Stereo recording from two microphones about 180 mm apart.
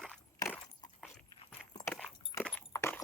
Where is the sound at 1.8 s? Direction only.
10° left (ahead or behind).